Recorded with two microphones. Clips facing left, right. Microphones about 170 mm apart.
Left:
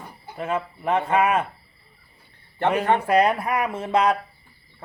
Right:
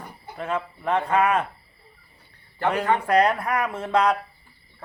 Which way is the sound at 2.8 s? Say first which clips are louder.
Left 2 dB; 20° left (ahead or behind).